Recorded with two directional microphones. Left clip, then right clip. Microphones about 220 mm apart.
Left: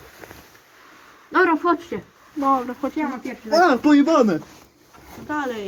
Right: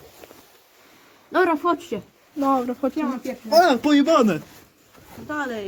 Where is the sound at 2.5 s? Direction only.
50° right (ahead or behind).